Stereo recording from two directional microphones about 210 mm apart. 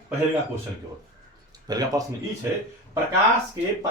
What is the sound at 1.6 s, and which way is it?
Speech, 15° right (ahead or behind).